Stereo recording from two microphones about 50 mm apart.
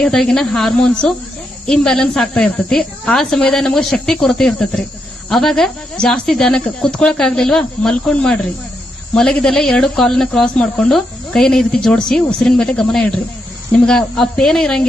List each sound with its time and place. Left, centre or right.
0.2 s speech: centre